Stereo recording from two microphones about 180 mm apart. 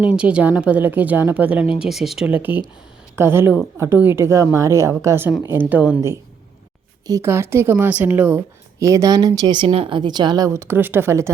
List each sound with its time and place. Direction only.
0.0 s a woman's voice: 5° right (ahead or behind)